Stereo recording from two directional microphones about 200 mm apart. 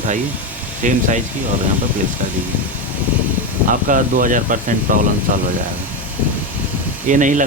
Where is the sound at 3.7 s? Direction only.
40° right (ahead or behind).